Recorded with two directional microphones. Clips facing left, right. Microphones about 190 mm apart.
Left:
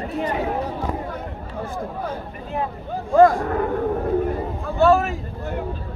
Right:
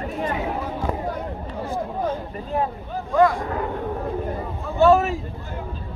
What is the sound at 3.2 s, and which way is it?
Speech, 45° left (ahead or behind).